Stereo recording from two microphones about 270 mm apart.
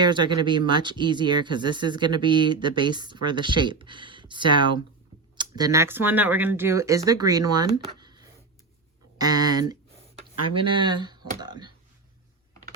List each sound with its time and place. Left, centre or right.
0.0 s speech: centre